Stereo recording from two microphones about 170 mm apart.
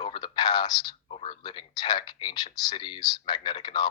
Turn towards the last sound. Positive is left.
turn(degrees=30)  # may be behind; listen again after turning